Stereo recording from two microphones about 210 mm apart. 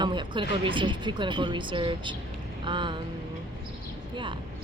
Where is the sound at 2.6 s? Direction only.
20° right (ahead or behind).